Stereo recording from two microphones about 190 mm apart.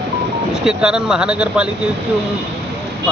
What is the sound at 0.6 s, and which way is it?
Speech, 5° right (ahead or behind).